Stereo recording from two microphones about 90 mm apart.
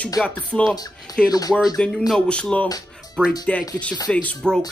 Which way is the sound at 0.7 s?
45° left (ahead or behind).